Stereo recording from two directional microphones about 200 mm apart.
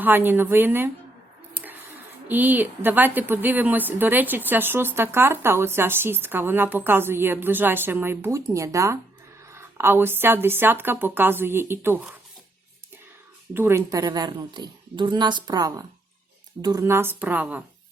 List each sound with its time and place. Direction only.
0.0 s a woman's voice: 10° right (ahead or behind)
1.5 s a sound: 10° right (ahead or behind)
2.2 s a woman's voice: 10° right (ahead or behind)
13.5 s a woman's voice: 10° right (ahead or behind)